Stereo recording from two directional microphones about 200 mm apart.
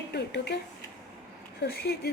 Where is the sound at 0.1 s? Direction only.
55° left (ahead or behind).